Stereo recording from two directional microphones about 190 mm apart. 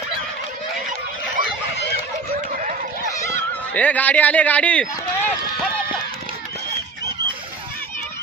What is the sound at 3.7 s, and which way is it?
Speech, 10° left (ahead or behind).